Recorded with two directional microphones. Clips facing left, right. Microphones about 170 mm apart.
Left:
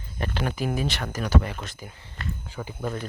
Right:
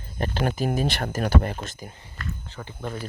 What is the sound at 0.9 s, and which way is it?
Speech, 50° right (ahead or behind).